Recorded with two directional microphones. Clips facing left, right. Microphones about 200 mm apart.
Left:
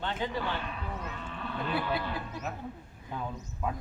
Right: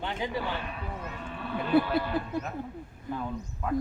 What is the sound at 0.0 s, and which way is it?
Speech, 10° right (ahead or behind).